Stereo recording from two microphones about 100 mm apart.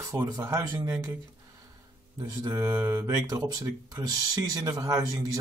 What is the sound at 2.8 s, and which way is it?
Speech, 35° right (ahead or behind).